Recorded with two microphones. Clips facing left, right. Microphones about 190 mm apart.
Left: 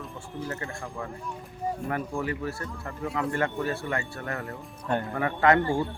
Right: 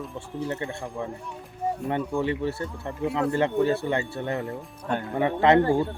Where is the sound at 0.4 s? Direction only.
20° right (ahead or behind).